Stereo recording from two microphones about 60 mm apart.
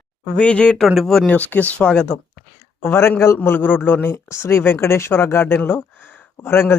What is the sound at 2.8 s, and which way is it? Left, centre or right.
A man's voice, left.